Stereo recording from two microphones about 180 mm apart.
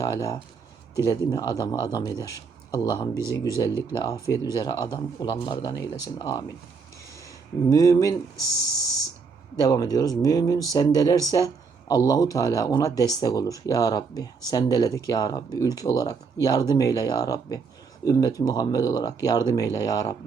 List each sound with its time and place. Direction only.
0.0 s speech: 20° left (ahead or behind)
9.6 s speech: 20° left (ahead or behind)